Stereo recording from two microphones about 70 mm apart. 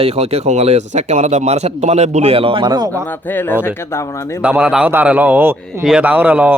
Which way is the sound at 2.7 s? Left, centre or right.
Right.